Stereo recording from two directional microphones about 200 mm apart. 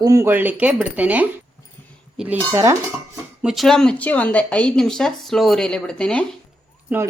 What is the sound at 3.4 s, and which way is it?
Speech, centre (ahead or behind).